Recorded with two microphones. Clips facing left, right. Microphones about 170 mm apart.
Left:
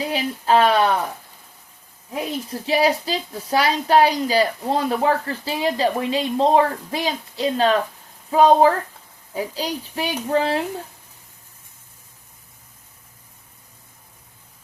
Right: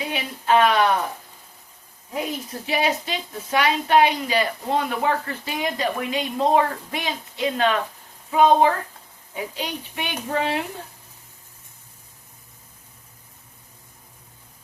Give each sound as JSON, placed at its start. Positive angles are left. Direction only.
{"t": 0.0, "sound": "speech", "side_deg": 35}
{"t": 2.5, "sound": "speech", "side_deg": 30}